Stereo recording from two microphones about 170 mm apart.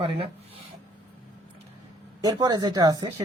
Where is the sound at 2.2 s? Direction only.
20° right (ahead or behind).